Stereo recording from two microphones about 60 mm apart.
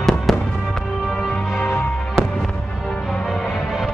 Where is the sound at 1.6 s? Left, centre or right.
Left.